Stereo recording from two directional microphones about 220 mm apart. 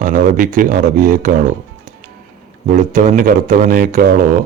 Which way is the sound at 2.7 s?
35° right (ahead or behind).